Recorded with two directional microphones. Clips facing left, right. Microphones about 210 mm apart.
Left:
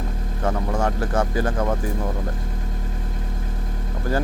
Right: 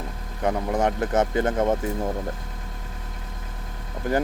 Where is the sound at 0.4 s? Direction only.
20° right (ahead or behind).